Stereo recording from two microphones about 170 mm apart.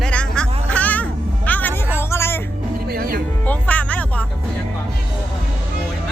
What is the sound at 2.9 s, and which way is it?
Music, 60° right (ahead or behind).